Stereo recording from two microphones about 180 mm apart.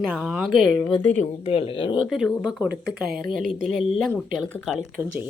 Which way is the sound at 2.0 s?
Centre (ahead or behind).